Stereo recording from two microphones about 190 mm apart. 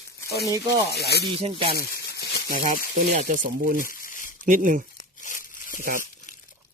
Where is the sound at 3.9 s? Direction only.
45° left (ahead or behind).